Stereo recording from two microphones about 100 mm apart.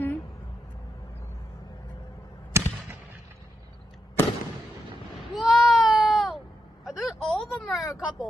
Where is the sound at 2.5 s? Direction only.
30° right (ahead or behind).